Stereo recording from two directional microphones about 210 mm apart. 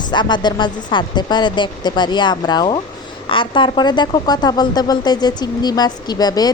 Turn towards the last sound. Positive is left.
turn(degrees=20)  # may be behind; listen again after turning